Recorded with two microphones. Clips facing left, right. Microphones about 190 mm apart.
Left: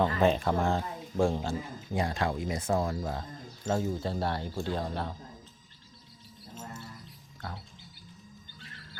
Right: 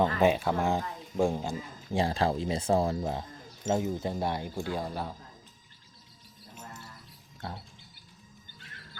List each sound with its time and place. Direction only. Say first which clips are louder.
0.0 s speech: right 1 dB; 10° right (ahead or behind)
1.9 s speech: right 3 dB; 30° right (ahead or behind); by 5.1 s 5° right (ahead or behind)
7.4 s speech: right 2 dB; 25° right (ahead or behind)